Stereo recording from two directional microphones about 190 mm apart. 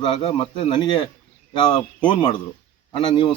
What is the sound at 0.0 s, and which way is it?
Speech, 30° left (ahead or behind).